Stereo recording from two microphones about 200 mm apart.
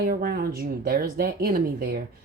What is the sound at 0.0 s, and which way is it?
Speech, 50° right (ahead or behind).